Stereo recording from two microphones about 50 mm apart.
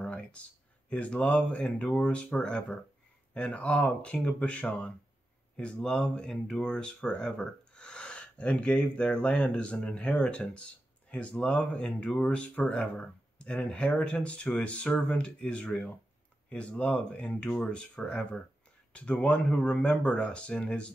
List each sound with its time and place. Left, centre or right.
0.0 s speech: left
5.9 s speech: left